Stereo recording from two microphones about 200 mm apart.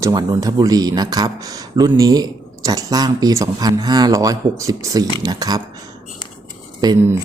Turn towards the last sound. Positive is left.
turn(degrees=-15)  # may be behind; listen again after turning